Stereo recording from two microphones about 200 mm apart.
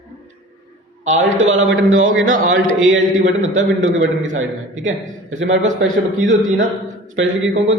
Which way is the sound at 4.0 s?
70° right (ahead or behind).